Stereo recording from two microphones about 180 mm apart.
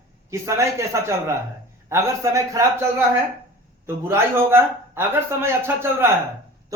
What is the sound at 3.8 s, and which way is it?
A man's voice, 15° right (ahead or behind).